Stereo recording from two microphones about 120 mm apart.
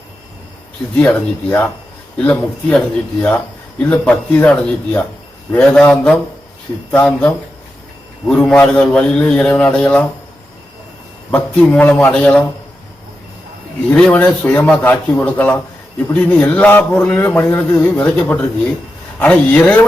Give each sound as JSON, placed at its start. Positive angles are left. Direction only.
{"t": 0.9, "sound": "a man's voice", "side_deg": 10}
{"t": 11.3, "sound": "a man's voice", "side_deg": 10}
{"t": 13.9, "sound": "a man's voice", "side_deg": 15}